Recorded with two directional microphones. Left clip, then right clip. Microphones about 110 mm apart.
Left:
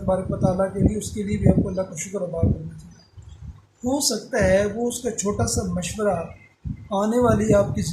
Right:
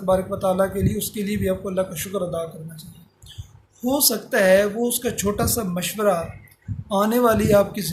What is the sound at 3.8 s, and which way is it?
Speech, 20° right (ahead or behind).